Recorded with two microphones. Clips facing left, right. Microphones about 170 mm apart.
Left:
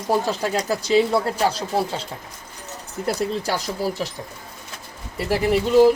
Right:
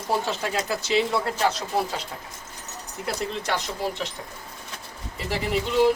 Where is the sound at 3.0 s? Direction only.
40° left (ahead or behind).